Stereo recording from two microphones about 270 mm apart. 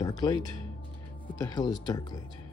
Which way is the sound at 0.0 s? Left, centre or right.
Centre.